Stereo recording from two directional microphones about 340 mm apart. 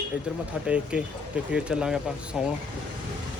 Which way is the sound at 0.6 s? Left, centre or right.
Centre.